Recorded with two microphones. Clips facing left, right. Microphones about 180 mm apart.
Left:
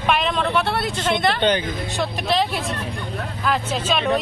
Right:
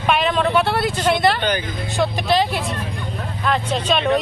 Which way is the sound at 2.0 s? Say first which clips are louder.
Right 4 dB; centre (ahead or behind).